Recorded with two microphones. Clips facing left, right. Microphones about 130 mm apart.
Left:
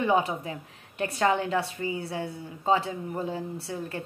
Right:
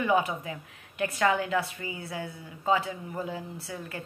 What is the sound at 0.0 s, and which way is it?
Speech, 30° left (ahead or behind).